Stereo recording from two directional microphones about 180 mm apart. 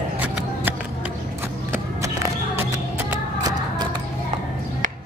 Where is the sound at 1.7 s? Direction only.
15° right (ahead or behind).